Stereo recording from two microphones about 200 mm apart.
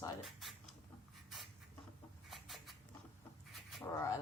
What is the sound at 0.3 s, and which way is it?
Speech, centre (ahead or behind).